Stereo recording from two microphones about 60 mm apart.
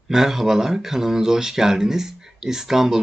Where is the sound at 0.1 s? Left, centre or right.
Centre.